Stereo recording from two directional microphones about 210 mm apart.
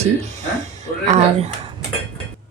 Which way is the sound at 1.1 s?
30° right (ahead or behind).